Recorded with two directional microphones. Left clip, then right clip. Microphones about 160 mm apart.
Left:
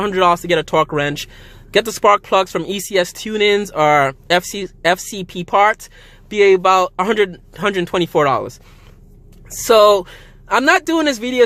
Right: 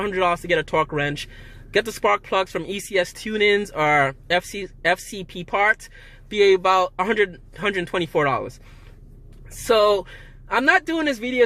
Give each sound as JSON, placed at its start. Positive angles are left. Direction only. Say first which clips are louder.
{"t": 0.0, "sound": "a man's voice", "louder": "left 7 dB", "side_deg": 35}
{"t": 9.6, "sound": "a man's voice", "louder": "left 7 dB", "side_deg": 40}